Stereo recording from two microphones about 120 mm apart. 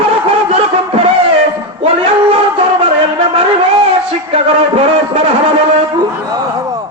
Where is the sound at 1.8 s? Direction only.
55° right (ahead or behind).